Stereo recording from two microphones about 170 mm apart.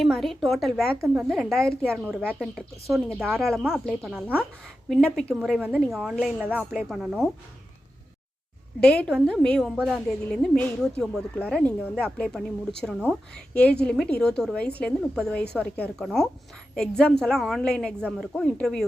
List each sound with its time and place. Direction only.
0.0 s a woman's voice: centre (ahead or behind)
1.8 s speech: 10° right (ahead or behind)
3.4 s a woman's voice: centre (ahead or behind)
5.5 s a woman's voice: 10° right (ahead or behind)
6.7 s a woman's voice: centre (ahead or behind)
8.8 s a woman's voice: 5° left (ahead or behind)